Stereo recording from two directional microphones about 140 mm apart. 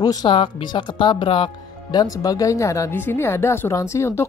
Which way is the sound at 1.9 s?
25° left (ahead or behind).